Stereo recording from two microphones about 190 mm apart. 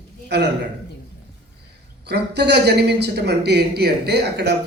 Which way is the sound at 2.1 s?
60° right (ahead or behind).